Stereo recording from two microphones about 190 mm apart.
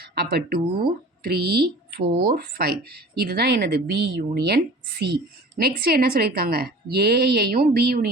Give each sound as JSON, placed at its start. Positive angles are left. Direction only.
{"t": 0.1, "sound": "speech", "side_deg": -55}